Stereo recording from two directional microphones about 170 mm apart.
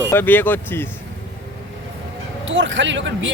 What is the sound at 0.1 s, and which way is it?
Speech, 10° left (ahead or behind).